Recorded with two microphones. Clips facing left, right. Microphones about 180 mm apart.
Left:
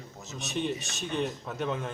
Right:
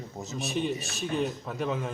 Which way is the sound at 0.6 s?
Centre (ahead or behind).